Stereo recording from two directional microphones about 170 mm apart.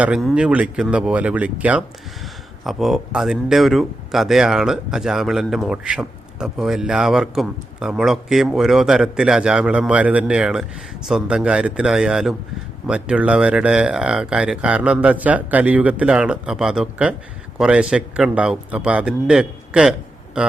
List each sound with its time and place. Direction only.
0.0 s speech: centre (ahead or behind)